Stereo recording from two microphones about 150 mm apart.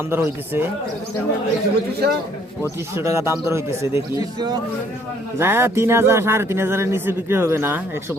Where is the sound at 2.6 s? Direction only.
20° right (ahead or behind).